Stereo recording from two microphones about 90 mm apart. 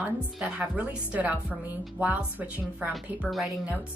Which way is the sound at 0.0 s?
15° right (ahead or behind).